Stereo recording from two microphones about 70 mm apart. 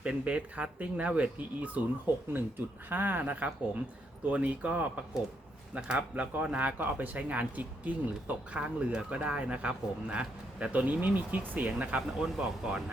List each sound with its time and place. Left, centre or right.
0.0 s speech: centre
2.9 s speech: right